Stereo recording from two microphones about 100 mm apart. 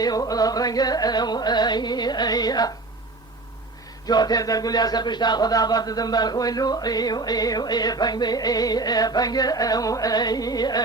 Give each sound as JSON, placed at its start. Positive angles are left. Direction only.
{"t": 0.0, "sound": "speech", "side_deg": 40}
{"t": 4.0, "sound": "speech", "side_deg": 40}